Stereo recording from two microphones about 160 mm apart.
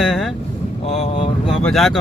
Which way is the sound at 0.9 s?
35° left (ahead or behind).